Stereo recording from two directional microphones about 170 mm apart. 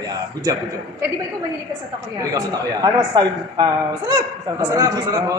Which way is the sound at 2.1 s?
20° right (ahead or behind).